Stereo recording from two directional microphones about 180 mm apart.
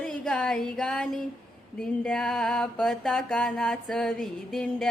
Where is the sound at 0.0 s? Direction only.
5° left (ahead or behind).